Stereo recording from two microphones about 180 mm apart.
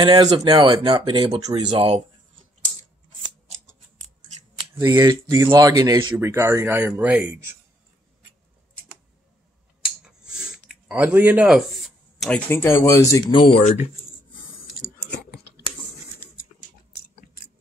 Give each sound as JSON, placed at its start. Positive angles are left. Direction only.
{"t": 0.0, "sound": "speech", "side_deg": -25}
{"t": 4.7, "sound": "speech", "side_deg": -20}
{"t": 9.8, "sound": "a sound", "side_deg": -5}
{"t": 12.4, "sound": "speech", "side_deg": 15}